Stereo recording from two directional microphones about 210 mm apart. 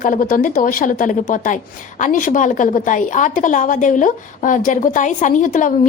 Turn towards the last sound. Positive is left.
turn(degrees=40)  # may be behind; listen again after turning